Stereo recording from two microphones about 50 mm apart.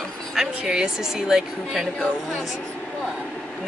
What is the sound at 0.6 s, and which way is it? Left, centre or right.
Speech, centre.